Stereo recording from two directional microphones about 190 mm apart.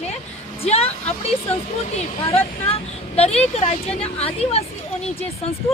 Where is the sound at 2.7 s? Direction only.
35° left (ahead or behind).